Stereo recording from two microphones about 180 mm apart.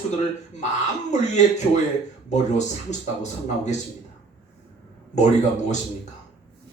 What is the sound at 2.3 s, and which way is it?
Speech, 40° left (ahead or behind).